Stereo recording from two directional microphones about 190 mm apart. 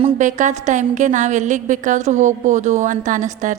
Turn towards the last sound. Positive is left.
turn(degrees=-40)  # may be behind; listen again after turning